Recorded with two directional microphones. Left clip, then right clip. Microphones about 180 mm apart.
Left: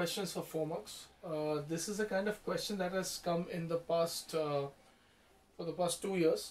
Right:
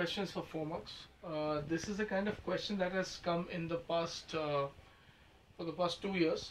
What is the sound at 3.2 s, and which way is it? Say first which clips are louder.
Speech: even; 25° left (ahead or behind).